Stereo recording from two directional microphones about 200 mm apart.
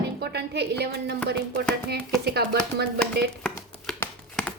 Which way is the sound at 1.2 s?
50° right (ahead or behind).